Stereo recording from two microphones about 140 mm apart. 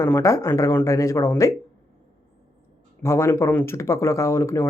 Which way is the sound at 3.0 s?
20° left (ahead or behind).